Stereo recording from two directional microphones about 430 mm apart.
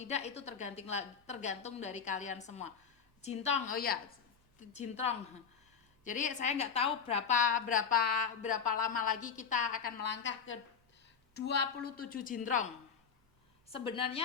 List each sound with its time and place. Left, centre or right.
0.0 s a woman's voice: centre